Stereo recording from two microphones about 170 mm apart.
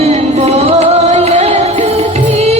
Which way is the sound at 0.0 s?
40° right (ahead or behind).